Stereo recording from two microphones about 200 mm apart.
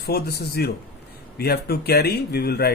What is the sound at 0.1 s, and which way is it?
Speech, 50° left (ahead or behind).